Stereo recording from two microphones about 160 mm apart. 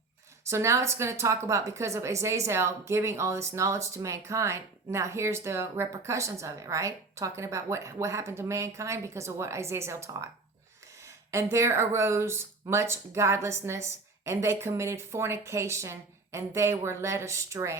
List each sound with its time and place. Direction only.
0.4 s a woman's voice: 20° right (ahead or behind)